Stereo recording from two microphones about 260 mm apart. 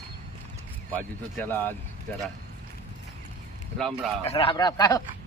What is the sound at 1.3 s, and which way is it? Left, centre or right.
Speech, centre.